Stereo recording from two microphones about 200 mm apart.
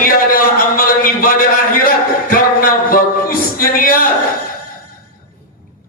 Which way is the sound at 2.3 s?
45° left (ahead or behind).